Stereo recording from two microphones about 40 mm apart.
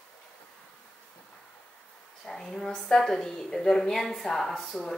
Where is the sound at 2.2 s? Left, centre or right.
Centre.